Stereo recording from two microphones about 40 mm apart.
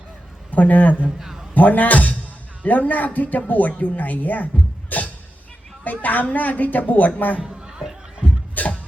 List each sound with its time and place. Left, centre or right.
0.5 s speech: left
1.2 s a man's voice: centre
1.5 s speech: left
4.9 s music: left
5.8 s speech: left
7.4 s a sound: centre
8.6 s music: left